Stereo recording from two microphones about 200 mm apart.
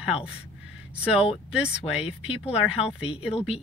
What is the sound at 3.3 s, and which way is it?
Speech, 30° left (ahead or behind).